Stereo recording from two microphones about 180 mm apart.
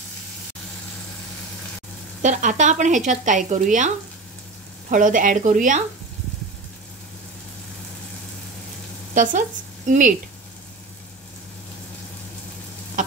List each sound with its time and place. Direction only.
2.2 s speech: 45° right (ahead or behind)
9.1 s speech: 45° right (ahead or behind)